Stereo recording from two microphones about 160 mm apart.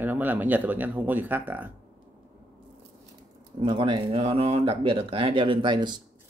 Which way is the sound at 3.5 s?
30° right (ahead or behind).